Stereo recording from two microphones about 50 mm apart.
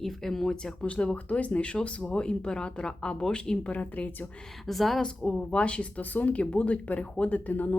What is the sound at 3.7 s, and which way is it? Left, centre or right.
Speech, left.